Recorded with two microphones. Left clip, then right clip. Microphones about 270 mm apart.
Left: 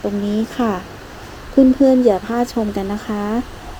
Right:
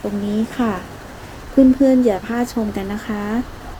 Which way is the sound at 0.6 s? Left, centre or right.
Left.